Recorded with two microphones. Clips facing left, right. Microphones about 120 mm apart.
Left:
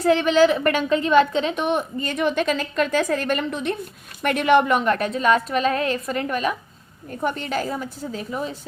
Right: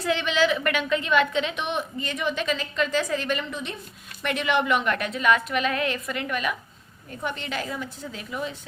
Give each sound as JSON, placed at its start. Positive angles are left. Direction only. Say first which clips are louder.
{"t": 0.0, "sound": "a woman's voice", "louder": "left 7 dB", "side_deg": 40}